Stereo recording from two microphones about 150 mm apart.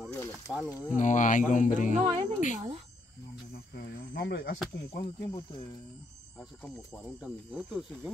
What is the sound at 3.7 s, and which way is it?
Speech, 90° left.